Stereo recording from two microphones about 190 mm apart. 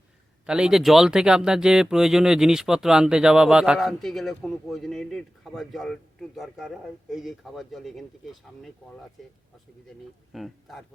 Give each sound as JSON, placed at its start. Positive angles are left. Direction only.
{"t": 0.4, "sound": "speech", "side_deg": -5}
{"t": 10.3, "sound": "speech", "side_deg": 0}